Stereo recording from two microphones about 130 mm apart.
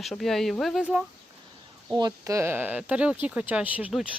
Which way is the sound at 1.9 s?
30° right (ahead or behind).